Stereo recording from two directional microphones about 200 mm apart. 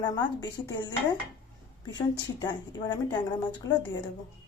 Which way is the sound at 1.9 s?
20° left (ahead or behind).